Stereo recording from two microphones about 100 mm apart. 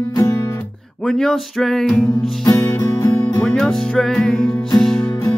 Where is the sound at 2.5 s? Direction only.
30° left (ahead or behind).